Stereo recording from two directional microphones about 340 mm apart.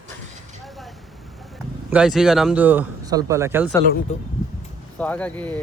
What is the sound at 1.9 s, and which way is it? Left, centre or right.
Speech, centre.